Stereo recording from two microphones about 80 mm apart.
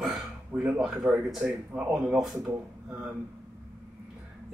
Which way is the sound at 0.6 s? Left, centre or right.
Centre.